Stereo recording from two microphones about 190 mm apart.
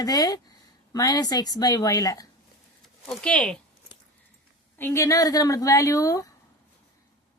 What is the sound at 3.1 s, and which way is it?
Speech, 5° left (ahead or behind).